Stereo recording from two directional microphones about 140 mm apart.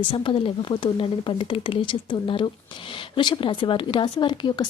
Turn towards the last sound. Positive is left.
turn(degrees=30)  # may be behind; listen again after turning